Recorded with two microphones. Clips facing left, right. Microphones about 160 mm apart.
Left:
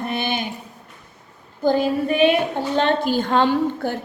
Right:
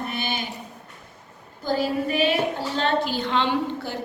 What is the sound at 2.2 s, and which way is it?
A woman's voice, 55° left (ahead or behind).